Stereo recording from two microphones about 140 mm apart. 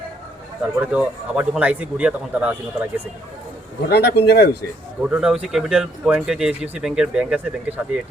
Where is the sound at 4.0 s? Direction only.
90° left.